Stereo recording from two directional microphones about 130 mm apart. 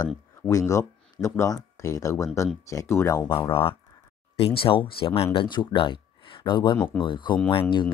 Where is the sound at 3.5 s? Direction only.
45° left (ahead or behind).